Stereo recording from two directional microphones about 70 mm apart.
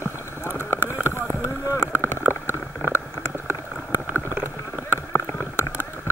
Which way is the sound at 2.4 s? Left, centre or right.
Left.